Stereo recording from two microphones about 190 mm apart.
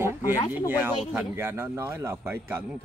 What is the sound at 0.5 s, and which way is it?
Speech, 10° right (ahead or behind).